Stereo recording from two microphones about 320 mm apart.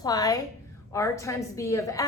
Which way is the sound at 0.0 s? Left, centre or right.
Centre.